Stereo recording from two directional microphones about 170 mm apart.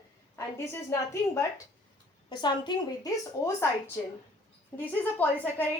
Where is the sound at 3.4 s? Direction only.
15° left (ahead or behind).